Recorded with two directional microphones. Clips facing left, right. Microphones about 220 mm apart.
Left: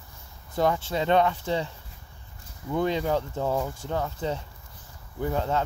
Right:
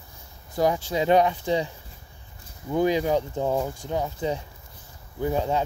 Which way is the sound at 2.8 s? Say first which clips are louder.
Right 4 dB; 15° right (ahead or behind).